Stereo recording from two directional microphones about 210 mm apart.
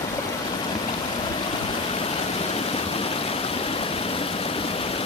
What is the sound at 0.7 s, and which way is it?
Stream, 20° left (ahead or behind).